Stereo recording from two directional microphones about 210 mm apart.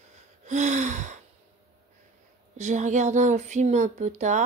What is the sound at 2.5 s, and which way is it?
Speech, 35° right (ahead or behind).